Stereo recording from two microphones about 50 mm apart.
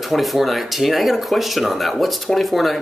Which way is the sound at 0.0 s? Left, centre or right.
Centre.